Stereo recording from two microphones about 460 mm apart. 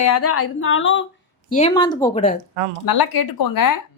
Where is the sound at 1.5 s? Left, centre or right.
Centre.